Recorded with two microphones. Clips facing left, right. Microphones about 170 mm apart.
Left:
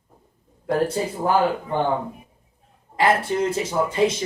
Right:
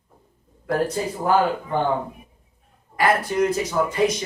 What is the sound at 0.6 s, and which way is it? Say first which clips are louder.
Speech: left 1 dB; 25° left (ahead or behind).